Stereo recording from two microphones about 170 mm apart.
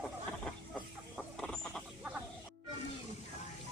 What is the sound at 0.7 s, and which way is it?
Chicken, 5° left (ahead or behind).